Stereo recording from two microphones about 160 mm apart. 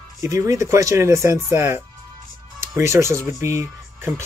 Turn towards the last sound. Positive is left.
turn(degrees=-15)  # may be behind; listen again after turning